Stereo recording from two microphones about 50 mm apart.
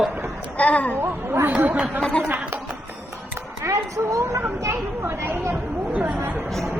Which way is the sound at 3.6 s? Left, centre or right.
Right.